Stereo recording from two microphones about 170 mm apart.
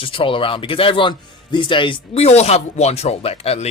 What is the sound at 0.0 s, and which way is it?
Speech, 30° left (ahead or behind).